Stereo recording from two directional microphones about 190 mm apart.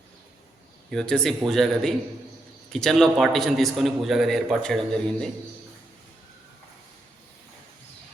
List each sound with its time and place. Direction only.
0.9 s a man's voice: 5° left (ahead or behind)